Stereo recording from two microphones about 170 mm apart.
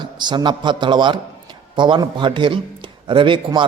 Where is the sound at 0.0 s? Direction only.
25° right (ahead or behind).